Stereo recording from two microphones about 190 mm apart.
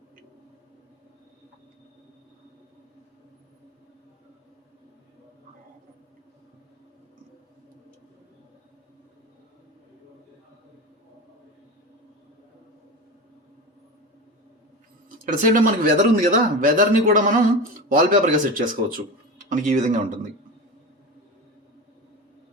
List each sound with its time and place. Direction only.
15.3 s speech: 45° right (ahead or behind)